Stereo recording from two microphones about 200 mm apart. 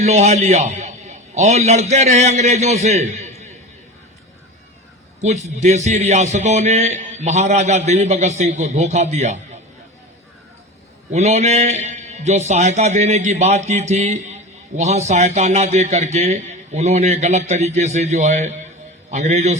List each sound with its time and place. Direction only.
0.0 s a man's voice: 35° right (ahead or behind)
5.2 s a man's voice: 35° right (ahead or behind)
11.1 s a man's voice: 35° right (ahead or behind)